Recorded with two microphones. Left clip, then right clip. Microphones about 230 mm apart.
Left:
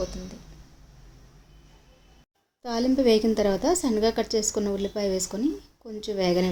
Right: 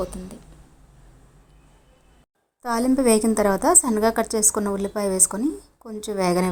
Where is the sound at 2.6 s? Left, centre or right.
Centre.